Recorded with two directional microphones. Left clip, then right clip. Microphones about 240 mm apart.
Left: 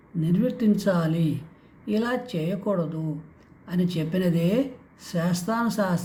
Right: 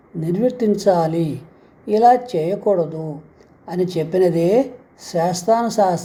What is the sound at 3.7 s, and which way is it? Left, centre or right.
Speech, centre.